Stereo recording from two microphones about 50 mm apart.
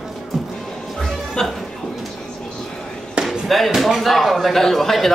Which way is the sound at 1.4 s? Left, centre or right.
Centre.